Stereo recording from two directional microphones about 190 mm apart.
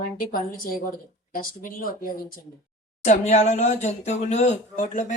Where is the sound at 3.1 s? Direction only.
40° left (ahead or behind).